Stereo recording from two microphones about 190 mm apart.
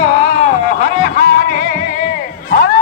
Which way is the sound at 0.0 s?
45° left (ahead or behind).